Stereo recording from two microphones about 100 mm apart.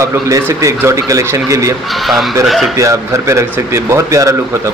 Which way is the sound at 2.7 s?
30° right (ahead or behind).